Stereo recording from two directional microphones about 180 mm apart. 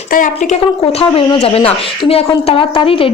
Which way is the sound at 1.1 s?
30° left (ahead or behind).